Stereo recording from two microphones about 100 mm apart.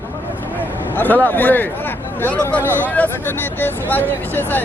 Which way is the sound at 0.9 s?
20° left (ahead or behind).